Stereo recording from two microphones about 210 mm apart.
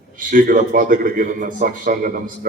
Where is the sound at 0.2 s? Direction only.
40° right (ahead or behind).